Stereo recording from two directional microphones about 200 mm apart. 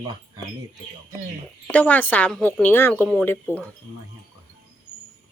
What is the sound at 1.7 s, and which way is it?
A woman's voice, 10° left (ahead or behind).